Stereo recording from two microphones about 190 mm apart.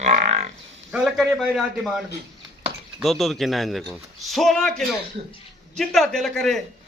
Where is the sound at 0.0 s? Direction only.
35° right (ahead or behind).